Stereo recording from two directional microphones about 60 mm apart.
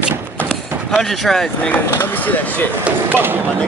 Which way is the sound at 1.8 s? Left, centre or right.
Left.